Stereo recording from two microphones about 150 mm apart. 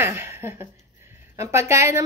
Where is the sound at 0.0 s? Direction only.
15° right (ahead or behind).